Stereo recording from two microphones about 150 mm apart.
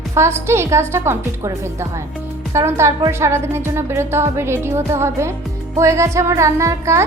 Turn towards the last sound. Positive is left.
turn(degrees=-20)  # may be behind; listen again after turning